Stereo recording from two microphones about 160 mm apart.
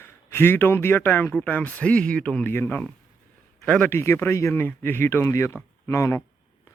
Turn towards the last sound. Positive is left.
turn(degrees=15)  # may be behind; listen again after turning